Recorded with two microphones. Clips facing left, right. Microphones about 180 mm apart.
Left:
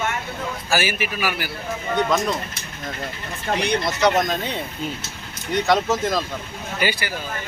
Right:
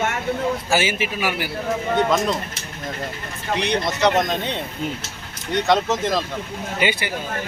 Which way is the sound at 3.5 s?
Centre (ahead or behind).